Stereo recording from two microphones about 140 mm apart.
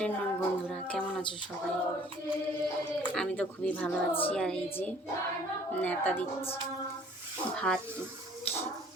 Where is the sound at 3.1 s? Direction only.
5° left (ahead or behind).